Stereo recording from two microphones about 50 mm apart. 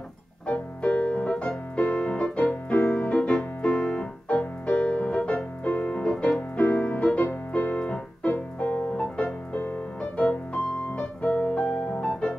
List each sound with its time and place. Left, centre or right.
0.5 s music: left
2.7 s keyboard: left
8.9 s music: left
11.3 s piano: left
12.1 s music: centre